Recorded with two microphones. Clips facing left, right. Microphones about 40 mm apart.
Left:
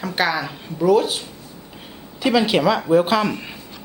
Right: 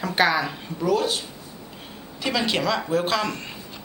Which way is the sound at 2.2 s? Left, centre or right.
Centre.